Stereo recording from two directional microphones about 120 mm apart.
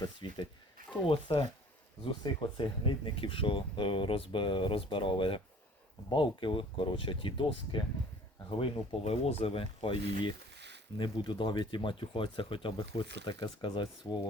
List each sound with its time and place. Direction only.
0.0 s speech: 40° left (ahead or behind)
10.9 s speech: 40° left (ahead or behind)